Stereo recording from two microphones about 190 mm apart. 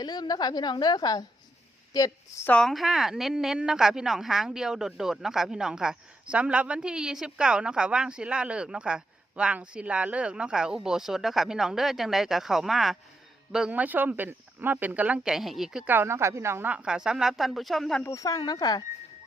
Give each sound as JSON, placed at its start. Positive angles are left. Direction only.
{"t": 0.0, "sound": "a woman's voice", "side_deg": 20}
{"t": 18.0, "sound": "a woman's voice", "side_deg": 20}